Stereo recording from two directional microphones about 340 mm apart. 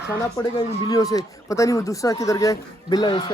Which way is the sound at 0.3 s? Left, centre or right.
Centre.